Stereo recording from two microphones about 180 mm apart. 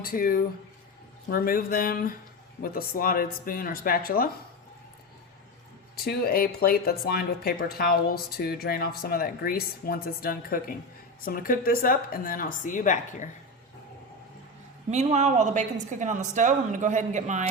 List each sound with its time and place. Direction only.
0.0 s a woman's voice: 50° left (ahead or behind)
6.1 s a woman's voice: 55° left (ahead or behind)
14.8 s speech: 40° right (ahead or behind)